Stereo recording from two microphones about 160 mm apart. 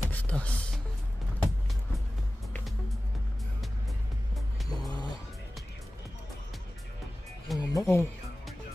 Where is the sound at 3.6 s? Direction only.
Centre (ahead or behind).